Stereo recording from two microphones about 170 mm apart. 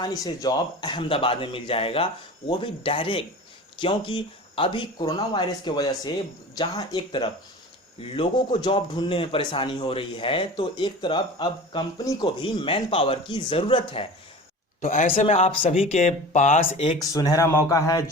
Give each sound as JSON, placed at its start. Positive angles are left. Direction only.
{"t": 0.0, "sound": "a man's voice", "side_deg": 20}
{"t": 14.8, "sound": "a man's voice", "side_deg": 50}
{"t": 15.1, "sound": "a man's voice", "side_deg": 35}
{"t": 17.0, "sound": "speech", "side_deg": 20}